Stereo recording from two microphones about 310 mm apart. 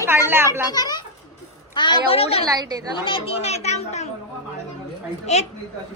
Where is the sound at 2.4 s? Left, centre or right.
Centre.